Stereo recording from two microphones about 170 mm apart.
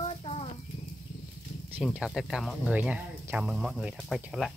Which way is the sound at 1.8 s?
Centre (ahead or behind).